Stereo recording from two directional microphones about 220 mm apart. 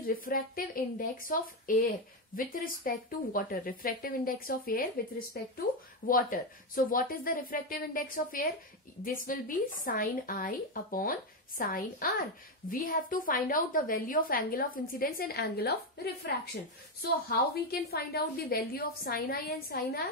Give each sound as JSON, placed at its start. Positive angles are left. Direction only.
{"t": 0.0, "sound": "a woman's voice", "side_deg": 40}
{"t": 17.6, "sound": "a woman's voice", "side_deg": 45}